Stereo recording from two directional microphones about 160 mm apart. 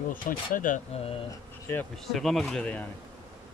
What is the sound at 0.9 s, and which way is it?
Speech, 35° left (ahead or behind).